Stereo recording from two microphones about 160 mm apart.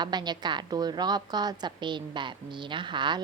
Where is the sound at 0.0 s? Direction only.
25° right (ahead or behind).